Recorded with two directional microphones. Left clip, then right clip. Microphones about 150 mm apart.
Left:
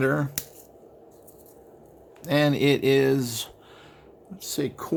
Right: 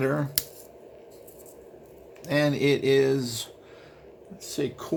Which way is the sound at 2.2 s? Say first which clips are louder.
Left 2 dB; 30° left (ahead or behind).